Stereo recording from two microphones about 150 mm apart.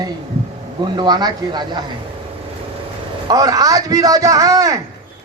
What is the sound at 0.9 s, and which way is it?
Speech, 30° right (ahead or behind).